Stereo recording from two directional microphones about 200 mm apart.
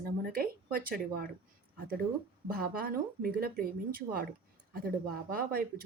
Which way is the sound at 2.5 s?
50° right (ahead or behind).